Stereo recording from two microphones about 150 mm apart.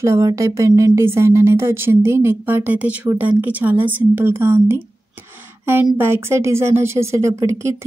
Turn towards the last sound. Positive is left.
turn(degrees=-20)  # may be behind; listen again after turning